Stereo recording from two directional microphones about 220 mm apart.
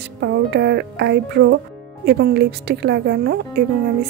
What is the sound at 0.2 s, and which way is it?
A woman's voice, 50° right (ahead or behind).